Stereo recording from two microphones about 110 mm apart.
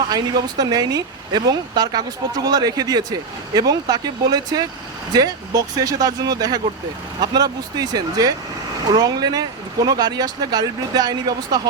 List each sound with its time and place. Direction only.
0.1 s speech: 40° right (ahead or behind)